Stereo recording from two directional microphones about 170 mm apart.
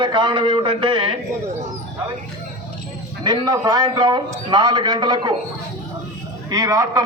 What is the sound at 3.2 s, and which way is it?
A man's voice, 25° right (ahead or behind).